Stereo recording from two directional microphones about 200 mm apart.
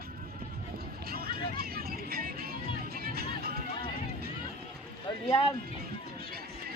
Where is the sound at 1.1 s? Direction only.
50° right (ahead or behind).